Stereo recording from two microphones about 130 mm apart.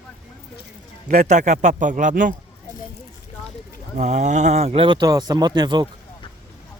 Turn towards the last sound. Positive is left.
turn(degrees=-30)  # may be behind; listen again after turning